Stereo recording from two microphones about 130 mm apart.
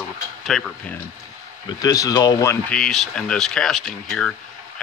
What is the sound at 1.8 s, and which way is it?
Speech, 30° left (ahead or behind).